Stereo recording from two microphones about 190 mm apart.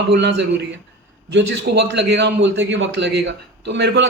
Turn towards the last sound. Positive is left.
turn(degrees=-65)  # may be behind; listen again after turning